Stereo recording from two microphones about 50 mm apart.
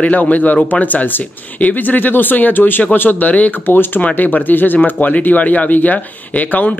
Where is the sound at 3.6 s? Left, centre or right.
Left.